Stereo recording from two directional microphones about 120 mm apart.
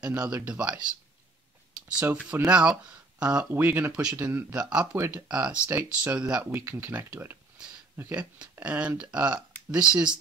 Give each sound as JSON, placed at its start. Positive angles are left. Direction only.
{"t": 0.0, "sound": "speech", "side_deg": -10}
{"t": 1.9, "sound": "speech", "side_deg": -10}
{"t": 4.9, "sound": "speech", "side_deg": -20}
{"t": 5.3, "sound": "speech", "side_deg": -10}